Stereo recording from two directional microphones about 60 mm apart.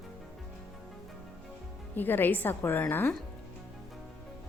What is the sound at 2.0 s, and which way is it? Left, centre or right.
Speech, left.